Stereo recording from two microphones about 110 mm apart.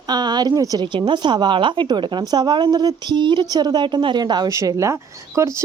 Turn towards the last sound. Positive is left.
turn(degrees=-25)  # may be behind; listen again after turning